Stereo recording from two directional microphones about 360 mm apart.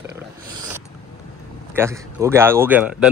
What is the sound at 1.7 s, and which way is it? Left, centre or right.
Speech, centre.